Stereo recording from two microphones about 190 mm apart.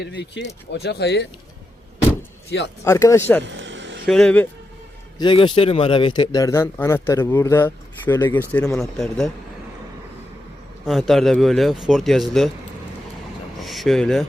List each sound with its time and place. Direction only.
0.0 s speech: 65° left (ahead or behind)
2.8 s a man's voice: 15° left (ahead or behind)
3.4 s vehicle: 75° right (ahead or behind)
4.0 s speech: 5° left (ahead or behind)
5.1 s a man's voice: 25° left (ahead or behind); by 9.3 s centre (ahead or behind)
10.8 s speech: centre (ahead or behind)
13.6 s a sound: centre (ahead or behind)